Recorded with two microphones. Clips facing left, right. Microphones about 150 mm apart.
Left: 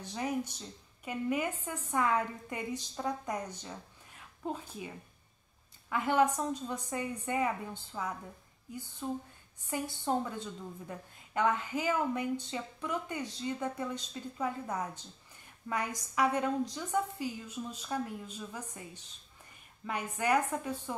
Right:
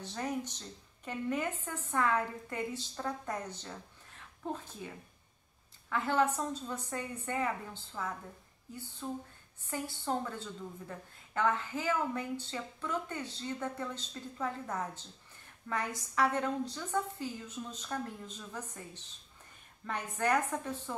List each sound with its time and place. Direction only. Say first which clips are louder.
0.0 s a woman's voice: left 2 dB; 10° left (ahead or behind)
19.9 s a woman's voice: left 1 dB; 10° left (ahead or behind)